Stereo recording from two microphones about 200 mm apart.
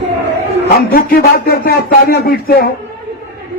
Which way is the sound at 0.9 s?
50° left (ahead or behind).